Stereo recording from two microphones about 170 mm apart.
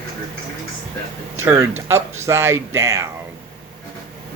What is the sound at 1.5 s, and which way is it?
Speech, 15° right (ahead or behind).